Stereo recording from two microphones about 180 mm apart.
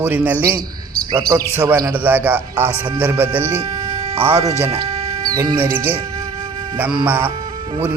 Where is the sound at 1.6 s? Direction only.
15° right (ahead or behind).